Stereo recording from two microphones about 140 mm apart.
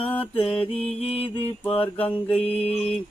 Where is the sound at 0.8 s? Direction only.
45° left (ahead or behind).